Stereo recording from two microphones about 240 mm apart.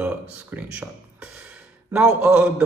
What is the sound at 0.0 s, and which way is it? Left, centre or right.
Speech, centre.